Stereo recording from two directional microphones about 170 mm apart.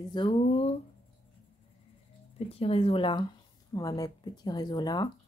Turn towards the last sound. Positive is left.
turn(degrees=25)  # may be behind; listen again after turning